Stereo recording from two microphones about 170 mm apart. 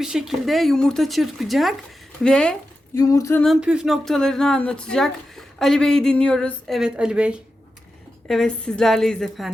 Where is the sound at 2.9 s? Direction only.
20° left (ahead or behind).